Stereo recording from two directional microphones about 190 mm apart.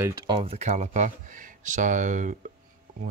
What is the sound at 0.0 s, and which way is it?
Speech, 15° right (ahead or behind).